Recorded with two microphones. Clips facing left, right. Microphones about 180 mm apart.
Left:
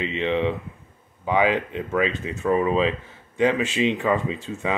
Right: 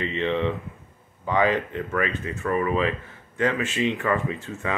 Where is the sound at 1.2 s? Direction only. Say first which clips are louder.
Left 1 dB; 15° left (ahead or behind).